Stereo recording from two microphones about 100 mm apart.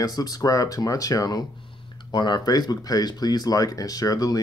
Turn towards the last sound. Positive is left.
turn(degrees=40)  # may be behind; listen again after turning